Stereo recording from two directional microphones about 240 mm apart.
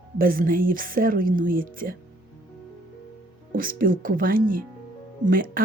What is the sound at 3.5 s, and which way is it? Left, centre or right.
Speech, right.